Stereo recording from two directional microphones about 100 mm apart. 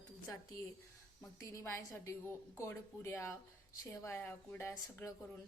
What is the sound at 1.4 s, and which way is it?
A woman's voice, 35° left (ahead or behind).